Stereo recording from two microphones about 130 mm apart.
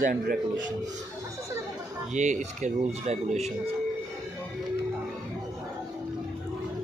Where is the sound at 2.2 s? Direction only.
70° right (ahead or behind).